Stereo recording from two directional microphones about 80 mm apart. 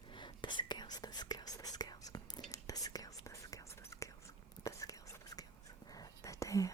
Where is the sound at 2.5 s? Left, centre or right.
Left.